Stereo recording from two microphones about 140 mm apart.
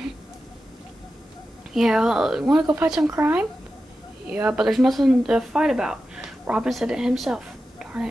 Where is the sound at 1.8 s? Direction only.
5° right (ahead or behind).